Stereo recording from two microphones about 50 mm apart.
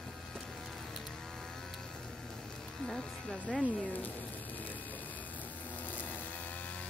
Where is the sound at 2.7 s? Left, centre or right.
Centre.